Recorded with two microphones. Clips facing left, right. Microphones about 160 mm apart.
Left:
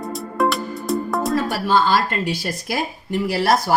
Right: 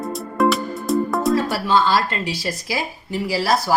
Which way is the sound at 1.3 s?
55° left (ahead or behind).